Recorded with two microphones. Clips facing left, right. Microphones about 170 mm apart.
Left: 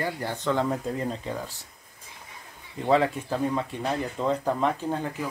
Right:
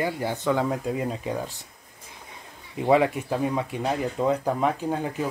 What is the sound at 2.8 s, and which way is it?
Speech, 15° right (ahead or behind).